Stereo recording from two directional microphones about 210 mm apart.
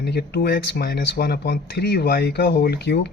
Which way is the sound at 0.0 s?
50° left (ahead or behind).